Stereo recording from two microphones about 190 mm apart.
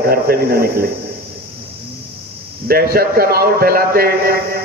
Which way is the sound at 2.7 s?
50° right (ahead or behind).